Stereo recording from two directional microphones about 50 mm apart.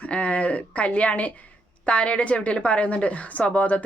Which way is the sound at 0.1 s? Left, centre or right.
Left.